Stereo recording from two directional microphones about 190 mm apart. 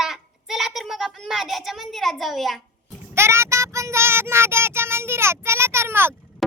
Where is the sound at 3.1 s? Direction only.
15° right (ahead or behind).